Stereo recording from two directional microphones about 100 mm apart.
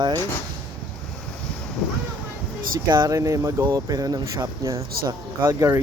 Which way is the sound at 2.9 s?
40° right (ahead or behind).